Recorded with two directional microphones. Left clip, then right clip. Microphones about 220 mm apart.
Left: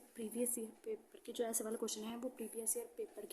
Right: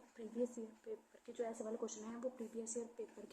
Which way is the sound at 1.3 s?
65° left (ahead or behind).